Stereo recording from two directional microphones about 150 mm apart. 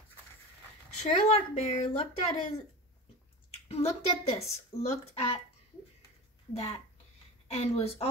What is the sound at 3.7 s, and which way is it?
Speech, 45° left (ahead or behind).